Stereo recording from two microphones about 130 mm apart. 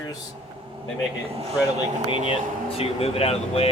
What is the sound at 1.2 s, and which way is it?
Speech, 50° right (ahead or behind).